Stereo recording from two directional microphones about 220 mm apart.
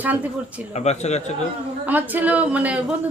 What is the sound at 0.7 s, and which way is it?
Speech, 30° left (ahead or behind).